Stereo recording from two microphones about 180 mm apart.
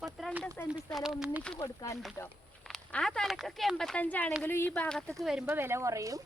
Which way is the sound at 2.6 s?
Centre (ahead or behind).